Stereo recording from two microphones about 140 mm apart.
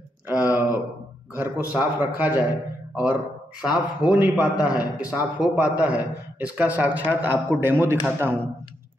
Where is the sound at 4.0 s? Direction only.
5° right (ahead or behind).